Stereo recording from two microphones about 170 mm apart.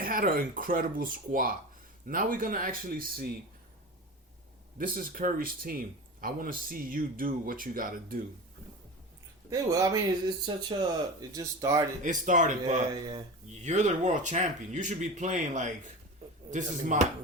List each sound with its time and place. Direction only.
0.0 s speech: 55° right (ahead or behind)
4.8 s speech: 55° right (ahead or behind)
9.5 s speech: 20° right (ahead or behind)
12.0 s speech: 50° right (ahead or behind)